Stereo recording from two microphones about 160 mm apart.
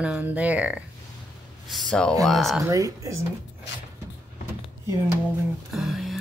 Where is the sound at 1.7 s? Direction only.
5° left (ahead or behind).